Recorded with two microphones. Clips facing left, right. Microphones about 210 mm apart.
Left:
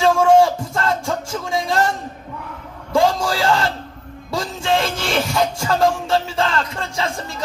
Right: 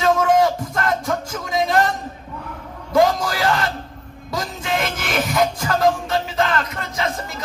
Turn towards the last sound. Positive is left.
turn(degrees=30)  # may be behind; listen again after turning